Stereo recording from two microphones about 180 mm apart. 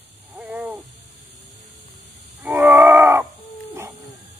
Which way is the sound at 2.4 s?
10° right (ahead or behind).